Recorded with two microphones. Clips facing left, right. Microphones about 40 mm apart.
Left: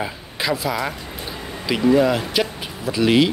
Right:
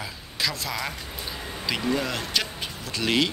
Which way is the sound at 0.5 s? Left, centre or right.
Centre.